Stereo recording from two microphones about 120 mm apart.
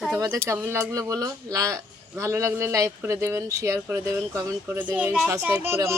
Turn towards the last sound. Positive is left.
turn(degrees=-20)  # may be behind; listen again after turning